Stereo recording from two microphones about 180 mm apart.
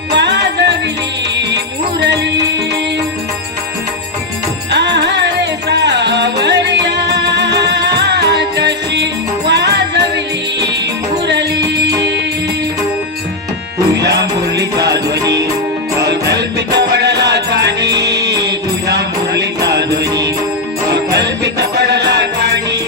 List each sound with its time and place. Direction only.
0.1 s music: 75° right (ahead or behind)
4.7 s music: 70° right (ahead or behind)
11.3 s music: 70° right (ahead or behind)
13.9 s music: 70° right (ahead or behind)